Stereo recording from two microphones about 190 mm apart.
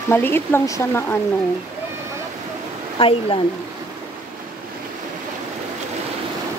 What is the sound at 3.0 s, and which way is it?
Speech, 30° left (ahead or behind).